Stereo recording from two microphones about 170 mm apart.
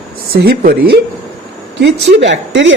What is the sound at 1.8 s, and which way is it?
Speech, 85° right.